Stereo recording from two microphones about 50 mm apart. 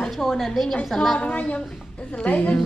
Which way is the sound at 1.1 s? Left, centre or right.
Left.